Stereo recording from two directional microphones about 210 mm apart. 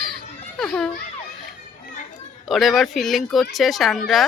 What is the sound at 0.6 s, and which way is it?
Speech, 5° left (ahead or behind).